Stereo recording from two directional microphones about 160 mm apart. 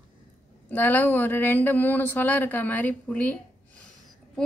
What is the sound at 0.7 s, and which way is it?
Speech, 10° left (ahead or behind).